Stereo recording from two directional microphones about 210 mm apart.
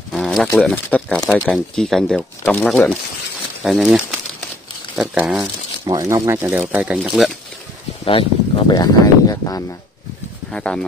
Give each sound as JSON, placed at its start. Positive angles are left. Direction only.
{"t": 0.1, "sound": "a sound", "side_deg": 0}
{"t": 0.5, "sound": "speech", "side_deg": 5}
{"t": 5.9, "sound": "speech", "side_deg": -20}
{"t": 8.0, "sound": "speech", "side_deg": 25}
{"t": 10.5, "sound": "speech", "side_deg": 5}